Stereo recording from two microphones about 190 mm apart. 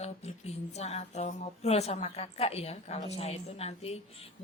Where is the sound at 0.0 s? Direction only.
35° left (ahead or behind).